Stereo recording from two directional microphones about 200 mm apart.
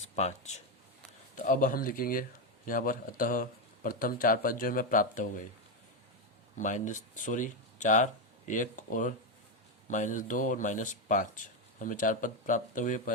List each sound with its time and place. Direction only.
0.2 s speech: 35° left (ahead or behind)
6.6 s speech: 40° left (ahead or behind)